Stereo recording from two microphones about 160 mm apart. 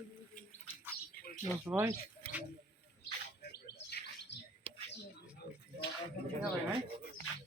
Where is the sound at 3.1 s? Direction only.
90° left.